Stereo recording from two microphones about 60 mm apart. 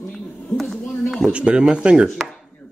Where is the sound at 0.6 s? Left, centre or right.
Centre.